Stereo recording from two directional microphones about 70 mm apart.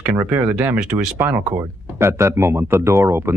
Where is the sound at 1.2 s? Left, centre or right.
Right.